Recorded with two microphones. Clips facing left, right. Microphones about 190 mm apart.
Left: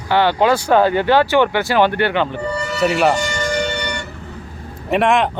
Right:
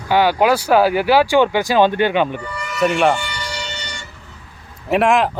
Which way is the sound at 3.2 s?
45° left (ahead or behind).